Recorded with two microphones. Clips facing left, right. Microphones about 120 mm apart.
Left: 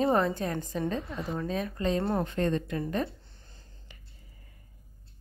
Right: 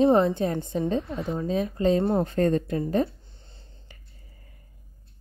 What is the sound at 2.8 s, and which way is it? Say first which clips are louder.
Speech: right 6 dB; 30° right (ahead or behind).